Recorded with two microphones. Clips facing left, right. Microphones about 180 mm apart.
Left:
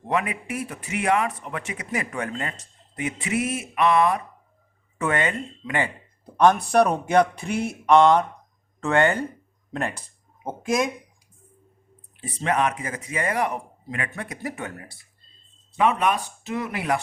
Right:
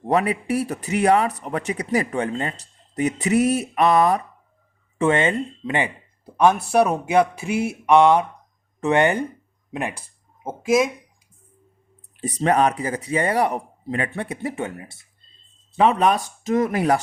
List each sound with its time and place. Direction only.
0.1 s a man's voice: 35° right (ahead or behind)
4.9 s speech: 25° right (ahead or behind)
6.2 s speech: 5° right (ahead or behind)
12.2 s a man's voice: 40° right (ahead or behind)